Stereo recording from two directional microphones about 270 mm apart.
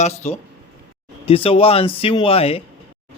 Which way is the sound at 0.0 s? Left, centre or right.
Left.